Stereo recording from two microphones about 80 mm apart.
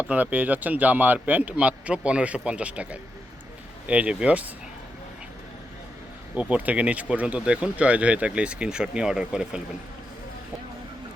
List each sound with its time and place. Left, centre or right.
0.1 s a man's voice: centre
6.3 s speech: centre